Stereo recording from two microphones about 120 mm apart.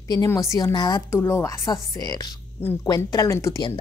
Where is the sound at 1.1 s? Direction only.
20° left (ahead or behind).